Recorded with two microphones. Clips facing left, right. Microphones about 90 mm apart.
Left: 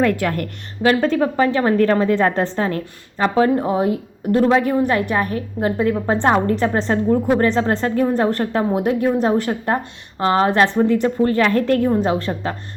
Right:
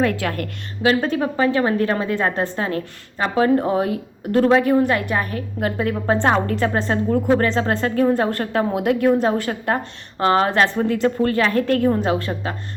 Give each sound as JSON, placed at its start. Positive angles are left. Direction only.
{"t": 0.0, "sound": "a woman's voice", "side_deg": 40}
{"t": 3.5, "sound": "a woman's voice", "side_deg": 20}
{"t": 5.9, "sound": "a woman's voice", "side_deg": 15}
{"t": 11.5, "sound": "a woman's voice", "side_deg": 35}